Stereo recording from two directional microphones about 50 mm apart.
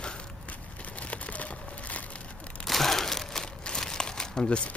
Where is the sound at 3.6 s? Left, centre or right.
Centre.